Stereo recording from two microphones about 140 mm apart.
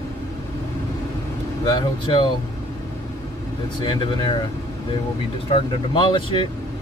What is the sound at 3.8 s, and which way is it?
Speech, 35° left (ahead or behind).